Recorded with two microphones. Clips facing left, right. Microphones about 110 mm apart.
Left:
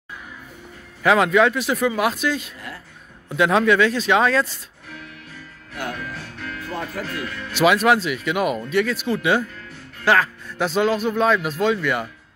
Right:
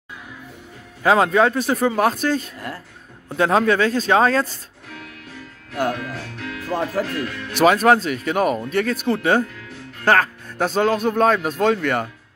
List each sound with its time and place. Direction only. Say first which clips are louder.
1.0 s speech: right 1 dB; 35° right (ahead or behind)
5.8 s music: right 7 dB; 45° right (ahead or behind)
6.6 s speech: right 7 dB; 40° right (ahead or behind)